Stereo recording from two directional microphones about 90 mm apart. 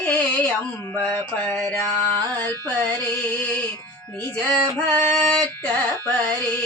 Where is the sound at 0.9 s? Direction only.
20° left (ahead or behind).